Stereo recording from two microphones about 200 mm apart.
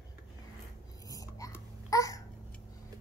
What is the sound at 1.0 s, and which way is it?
Whispering, 15° left (ahead or behind).